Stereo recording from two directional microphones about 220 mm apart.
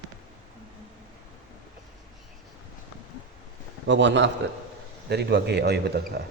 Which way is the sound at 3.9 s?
55° right (ahead or behind).